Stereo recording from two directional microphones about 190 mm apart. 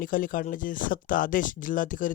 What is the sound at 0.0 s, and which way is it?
Speech, 45° left (ahead or behind).